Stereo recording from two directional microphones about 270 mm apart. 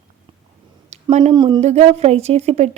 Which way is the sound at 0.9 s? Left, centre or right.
Right.